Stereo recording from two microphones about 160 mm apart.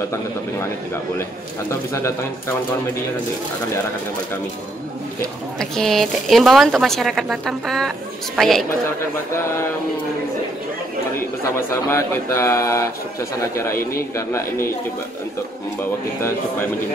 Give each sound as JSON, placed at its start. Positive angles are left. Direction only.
{"t": 1.7, "sound": "speech", "side_deg": 15}
{"t": 5.6, "sound": "speech", "side_deg": 0}
{"t": 9.3, "sound": "speech", "side_deg": 15}
{"t": 11.9, "sound": "speech", "side_deg": 15}
{"t": 13.9, "sound": "speech", "side_deg": 15}
{"t": 16.2, "sound": "speech", "side_deg": 15}